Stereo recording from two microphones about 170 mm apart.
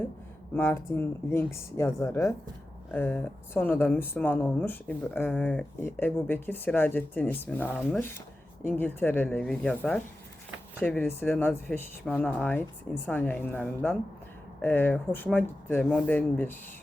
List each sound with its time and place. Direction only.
0.5 s speech: 10° left (ahead or behind)